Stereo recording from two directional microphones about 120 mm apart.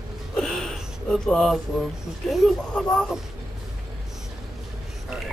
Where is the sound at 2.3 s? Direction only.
5° left (ahead or behind).